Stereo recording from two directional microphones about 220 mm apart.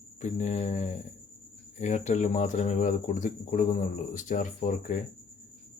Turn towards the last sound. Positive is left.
turn(degrees=35)  # may be behind; listen again after turning